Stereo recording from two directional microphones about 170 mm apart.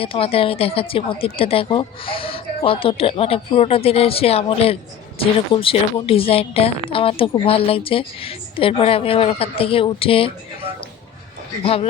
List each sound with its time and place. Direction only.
0.0 s a woman's voice: 35° left (ahead or behind)